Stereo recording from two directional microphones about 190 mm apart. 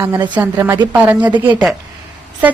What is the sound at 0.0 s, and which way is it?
A woman's voice, 15° right (ahead or behind).